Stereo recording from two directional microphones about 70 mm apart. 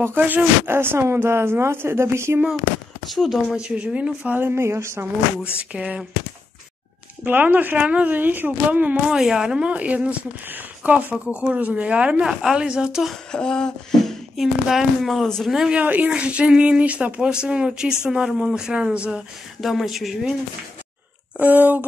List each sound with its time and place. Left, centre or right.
0.0 s speech: right
3.1 s a woman's voice: centre
4.4 s speech: right
5.6 s speech: centre
7.2 s speech: right
9.1 s a woman's voice: centre
13.3 s a sound: centre
14.3 s speech: centre
15.2 s a sound: centre
15.5 s a woman's voice: centre
15.8 s a woman's voice: right; by 20.3 s centre
21.4 s speech: right